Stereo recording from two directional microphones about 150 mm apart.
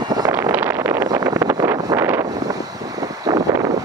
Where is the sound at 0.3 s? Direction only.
15° right (ahead or behind).